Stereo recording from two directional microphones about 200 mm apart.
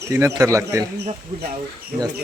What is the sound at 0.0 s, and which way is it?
Speech, 15° right (ahead or behind).